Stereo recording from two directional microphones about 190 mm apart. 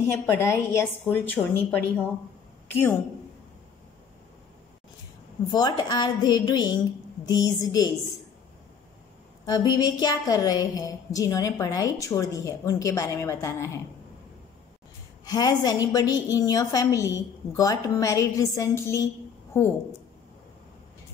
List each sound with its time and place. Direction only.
0.1 s a woman's voice: 15° left (ahead or behind)
5.5 s a woman's voice: 20° left (ahead or behind)
9.5 s a woman's voice: 20° left (ahead or behind)
15.2 s a woman's voice: 20° left (ahead or behind)